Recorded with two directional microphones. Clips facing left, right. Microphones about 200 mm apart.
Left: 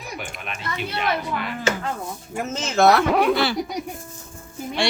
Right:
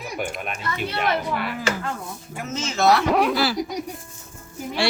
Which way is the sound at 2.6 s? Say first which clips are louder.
Left 3 dB; 55° left (ahead or behind).